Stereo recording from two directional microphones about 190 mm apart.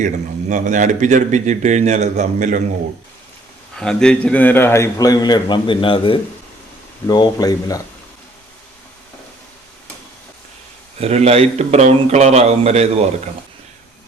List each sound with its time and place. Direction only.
0.0 s speech: 40° right (ahead or behind)
3.8 s a man's voice: 5° left (ahead or behind); by 7.8 s 20° left (ahead or behind)
11.0 s speech: 35° right (ahead or behind)